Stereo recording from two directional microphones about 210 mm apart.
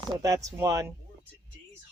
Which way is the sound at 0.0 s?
20° right (ahead or behind).